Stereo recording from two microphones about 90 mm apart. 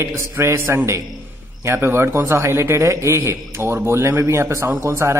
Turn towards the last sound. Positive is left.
turn(degrees=-30)  # may be behind; listen again after turning